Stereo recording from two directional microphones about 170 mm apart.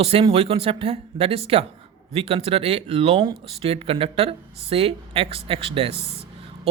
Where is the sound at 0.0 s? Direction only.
35° right (ahead or behind).